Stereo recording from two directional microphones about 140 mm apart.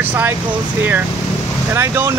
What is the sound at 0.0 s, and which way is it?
Speech, 15° right (ahead or behind).